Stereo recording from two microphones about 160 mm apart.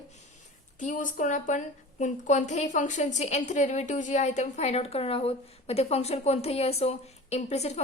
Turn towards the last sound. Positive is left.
turn(degrees=45)  # may be behind; listen again after turning